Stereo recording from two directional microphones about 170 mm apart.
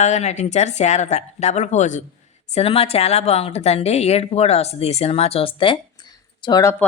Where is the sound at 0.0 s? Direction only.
40° left (ahead or behind).